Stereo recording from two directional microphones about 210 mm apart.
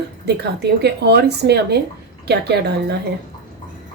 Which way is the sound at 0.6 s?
50° right (ahead or behind).